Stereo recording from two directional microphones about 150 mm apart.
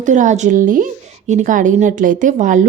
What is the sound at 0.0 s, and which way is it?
A woman's voice, 55° right (ahead or behind).